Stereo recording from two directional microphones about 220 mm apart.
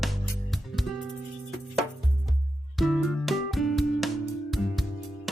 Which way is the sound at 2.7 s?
Centre (ahead or behind).